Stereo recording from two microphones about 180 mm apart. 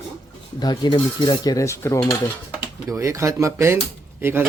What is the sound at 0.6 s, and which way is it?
Speech, 25° left (ahead or behind).